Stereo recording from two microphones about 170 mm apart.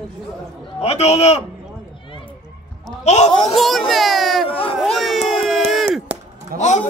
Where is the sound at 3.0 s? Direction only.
40° left (ahead or behind).